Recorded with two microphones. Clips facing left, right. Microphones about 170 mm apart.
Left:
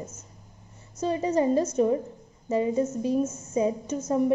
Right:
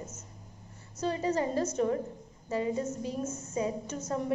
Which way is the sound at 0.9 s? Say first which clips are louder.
Left 5 dB; 20° left (ahead or behind).